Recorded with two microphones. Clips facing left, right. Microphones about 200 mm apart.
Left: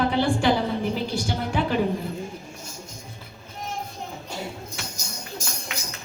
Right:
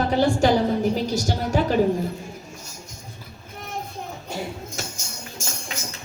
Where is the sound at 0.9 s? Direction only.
40° right (ahead or behind).